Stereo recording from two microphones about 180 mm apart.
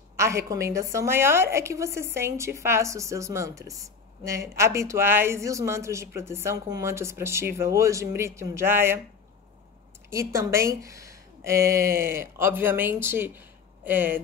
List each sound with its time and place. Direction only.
0.2 s a woman's voice: 15° right (ahead or behind)
10.0 s a woman's voice: 15° right (ahead or behind)